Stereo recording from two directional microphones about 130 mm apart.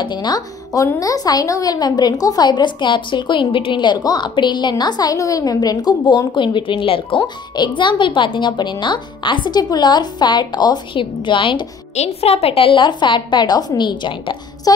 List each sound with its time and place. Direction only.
0.0 s a woman's voice: 35° left (ahead or behind)
11.9 s a woman's voice: 55° left (ahead or behind); by 14.7 s 40° left (ahead or behind)